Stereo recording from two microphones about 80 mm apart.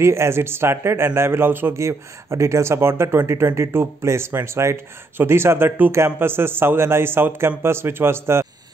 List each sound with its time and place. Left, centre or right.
0.0 s a man's voice: right